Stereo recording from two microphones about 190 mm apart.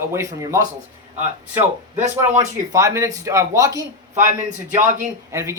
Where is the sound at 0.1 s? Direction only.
15° right (ahead or behind).